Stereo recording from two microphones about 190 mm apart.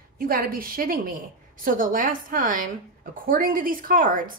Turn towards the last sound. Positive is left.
turn(degrees=-45)  # may be behind; listen again after turning